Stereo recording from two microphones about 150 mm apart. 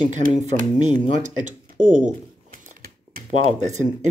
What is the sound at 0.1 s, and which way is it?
Speech, 55° right (ahead or behind).